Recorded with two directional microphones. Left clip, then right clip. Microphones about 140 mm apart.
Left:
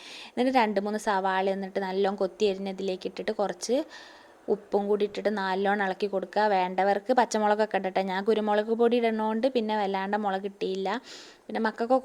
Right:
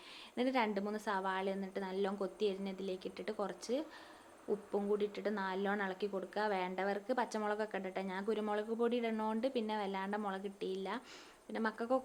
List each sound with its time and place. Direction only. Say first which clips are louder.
0.3 s a woman's voice: left 11 dB; 50° left (ahead or behind)